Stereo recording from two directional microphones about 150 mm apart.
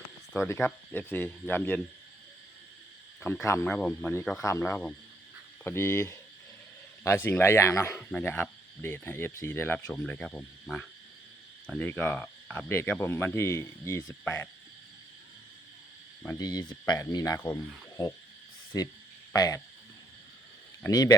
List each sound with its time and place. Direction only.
0.4 s speech: 15° left (ahead or behind)
3.2 s speech: 15° left (ahead or behind)
16.4 s speech: 25° left (ahead or behind)
18.0 s speech: 25° left (ahead or behind)
19.3 s frog: 20° left (ahead or behind)
20.8 s speech: 25° left (ahead or behind)